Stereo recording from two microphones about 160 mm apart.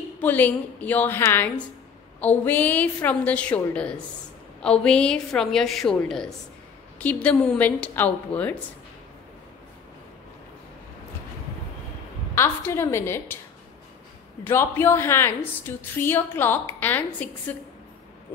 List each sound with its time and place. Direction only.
0.2 s a woman's voice: 10° left (ahead or behind)
12.4 s a woman's voice: 15° left (ahead or behind)
14.4 s a woman's voice: 15° left (ahead or behind)